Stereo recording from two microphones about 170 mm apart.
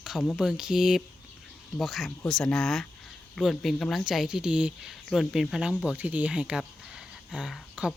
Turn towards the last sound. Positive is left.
turn(degrees=-5)  # may be behind; listen again after turning